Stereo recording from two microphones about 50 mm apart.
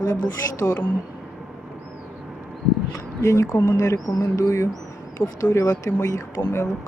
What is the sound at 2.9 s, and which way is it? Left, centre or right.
Speech, left.